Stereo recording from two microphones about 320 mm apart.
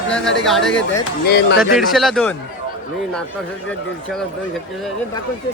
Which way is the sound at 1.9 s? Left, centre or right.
Centre.